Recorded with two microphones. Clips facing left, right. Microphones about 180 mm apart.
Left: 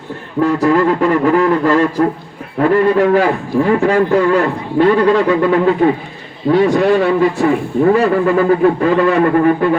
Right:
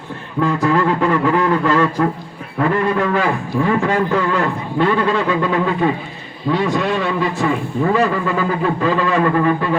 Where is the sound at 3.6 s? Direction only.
40° left (ahead or behind).